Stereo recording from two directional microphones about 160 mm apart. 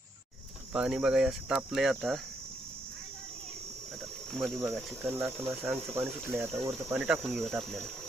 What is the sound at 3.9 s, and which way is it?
Cricket, 5° left (ahead or behind).